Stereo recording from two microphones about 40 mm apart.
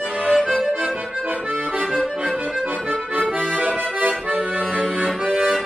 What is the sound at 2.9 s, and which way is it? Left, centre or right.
Accordion, right.